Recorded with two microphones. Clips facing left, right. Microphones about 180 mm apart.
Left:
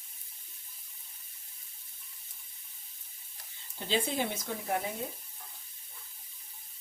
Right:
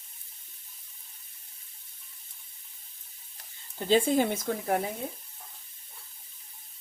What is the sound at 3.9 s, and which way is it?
Speech, 45° right (ahead or behind).